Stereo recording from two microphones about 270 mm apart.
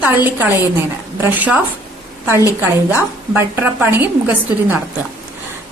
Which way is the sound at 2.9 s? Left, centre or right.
Centre.